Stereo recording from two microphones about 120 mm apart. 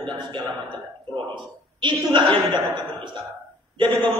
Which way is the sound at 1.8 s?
40° right (ahead or behind).